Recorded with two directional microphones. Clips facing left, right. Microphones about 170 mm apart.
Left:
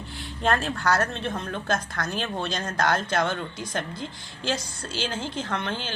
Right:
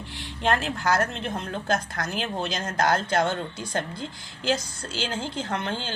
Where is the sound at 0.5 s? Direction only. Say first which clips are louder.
Even; 25° right (ahead or behind).